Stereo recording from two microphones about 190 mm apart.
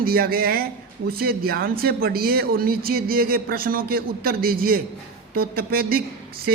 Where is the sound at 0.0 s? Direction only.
50° right (ahead or behind).